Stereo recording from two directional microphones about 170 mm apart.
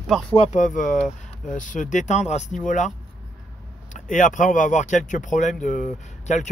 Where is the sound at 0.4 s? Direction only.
45° left (ahead or behind).